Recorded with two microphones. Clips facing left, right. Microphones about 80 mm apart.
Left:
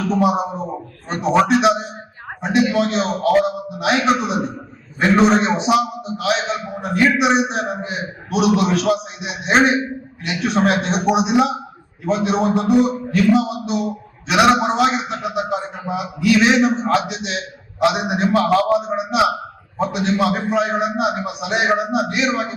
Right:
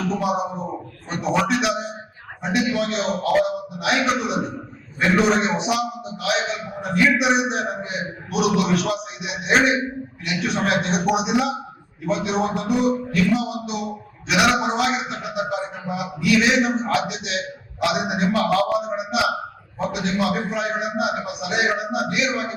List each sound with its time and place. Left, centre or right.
0.1 s a man's voice: left